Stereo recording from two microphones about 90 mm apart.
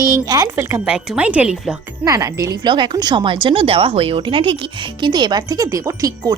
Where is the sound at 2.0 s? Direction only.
40° right (ahead or behind).